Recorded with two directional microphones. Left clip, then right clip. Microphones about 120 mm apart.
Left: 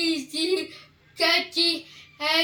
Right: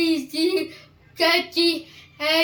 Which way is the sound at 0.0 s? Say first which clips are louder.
Right 4 dB; centre (ahead or behind).